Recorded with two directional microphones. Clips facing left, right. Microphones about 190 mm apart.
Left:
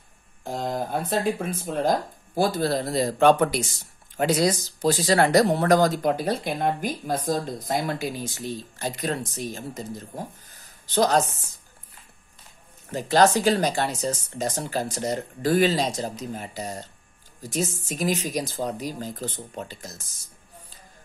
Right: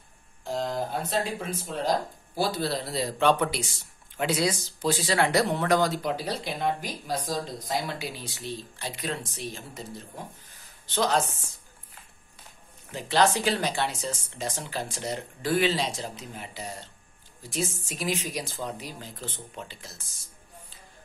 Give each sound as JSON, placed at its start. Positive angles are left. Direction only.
{"t": 0.4, "sound": "speech", "side_deg": 50}
{"t": 12.9, "sound": "speech", "side_deg": 40}